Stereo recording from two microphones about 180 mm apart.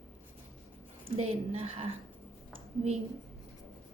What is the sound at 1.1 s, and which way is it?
Speech, 35° right (ahead or behind).